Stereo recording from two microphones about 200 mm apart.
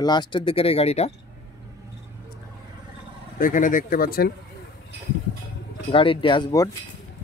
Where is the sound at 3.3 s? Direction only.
40° left (ahead or behind).